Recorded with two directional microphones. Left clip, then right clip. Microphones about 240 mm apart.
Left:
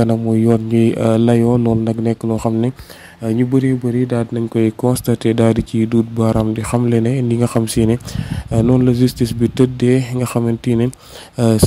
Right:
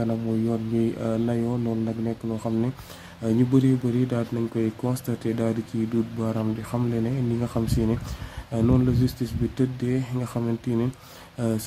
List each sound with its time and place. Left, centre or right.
0.0 s speech: left
3.3 s speech: left